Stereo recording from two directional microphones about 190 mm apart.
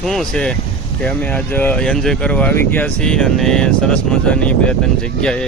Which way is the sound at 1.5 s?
10° left (ahead or behind).